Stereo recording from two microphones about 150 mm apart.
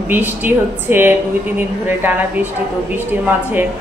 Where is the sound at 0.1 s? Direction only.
10° right (ahead or behind).